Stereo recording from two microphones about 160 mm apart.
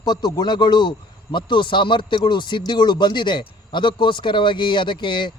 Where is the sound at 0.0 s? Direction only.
25° left (ahead or behind).